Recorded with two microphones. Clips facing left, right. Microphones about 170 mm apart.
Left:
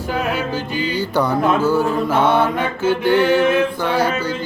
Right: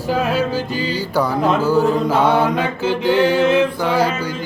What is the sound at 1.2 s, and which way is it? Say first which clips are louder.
Mantra: even; 10° right (ahead or behind).